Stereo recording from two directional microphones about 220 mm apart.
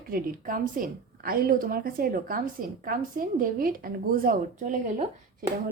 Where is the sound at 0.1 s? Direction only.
40° right (ahead or behind).